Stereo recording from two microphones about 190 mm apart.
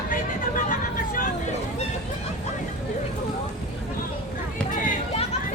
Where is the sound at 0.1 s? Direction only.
45° left (ahead or behind).